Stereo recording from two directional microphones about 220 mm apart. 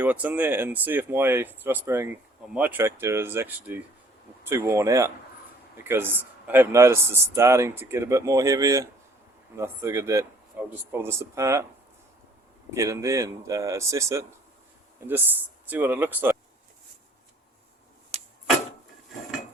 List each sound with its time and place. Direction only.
0.0 s speech: 10° right (ahead or behind)
12.7 s speech: 15° right (ahead or behind)
18.1 s a sound: 30° right (ahead or behind)